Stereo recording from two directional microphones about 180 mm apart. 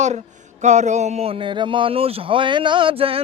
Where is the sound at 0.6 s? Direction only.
40° right (ahead or behind).